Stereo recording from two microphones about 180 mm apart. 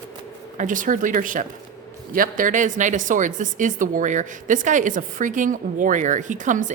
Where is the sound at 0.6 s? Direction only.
45° right (ahead or behind).